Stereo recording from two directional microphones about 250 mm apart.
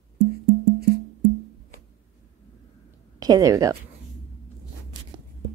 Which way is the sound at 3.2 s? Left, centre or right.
Centre.